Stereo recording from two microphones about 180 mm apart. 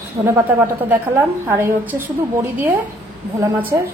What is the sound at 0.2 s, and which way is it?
A woman's voice, 15° right (ahead or behind).